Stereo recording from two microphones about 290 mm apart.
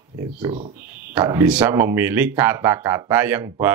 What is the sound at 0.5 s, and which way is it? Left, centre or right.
Speech, right.